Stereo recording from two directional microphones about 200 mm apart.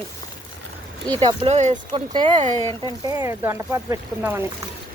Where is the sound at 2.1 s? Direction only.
25° right (ahead or behind).